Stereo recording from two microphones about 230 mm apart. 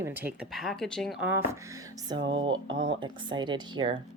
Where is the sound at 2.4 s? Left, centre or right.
Right.